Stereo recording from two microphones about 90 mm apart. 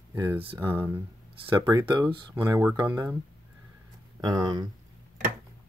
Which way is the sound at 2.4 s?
35° right (ahead or behind).